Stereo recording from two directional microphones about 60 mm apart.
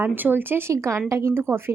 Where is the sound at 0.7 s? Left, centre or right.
Right.